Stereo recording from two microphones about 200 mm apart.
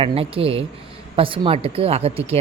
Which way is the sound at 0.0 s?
30° right (ahead or behind).